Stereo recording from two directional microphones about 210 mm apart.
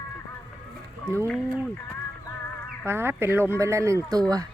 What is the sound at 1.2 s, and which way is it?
Speech, 5° left (ahead or behind).